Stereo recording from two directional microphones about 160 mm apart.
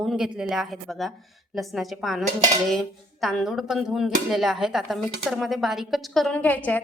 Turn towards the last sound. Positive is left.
turn(degrees=10)  # may be behind; listen again after turning